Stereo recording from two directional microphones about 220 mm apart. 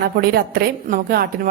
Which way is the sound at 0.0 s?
45° right (ahead or behind).